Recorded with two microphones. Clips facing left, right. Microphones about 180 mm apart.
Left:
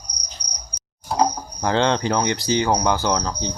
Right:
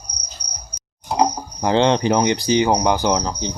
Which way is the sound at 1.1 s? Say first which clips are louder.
Right 2 dB; 15° right (ahead or behind).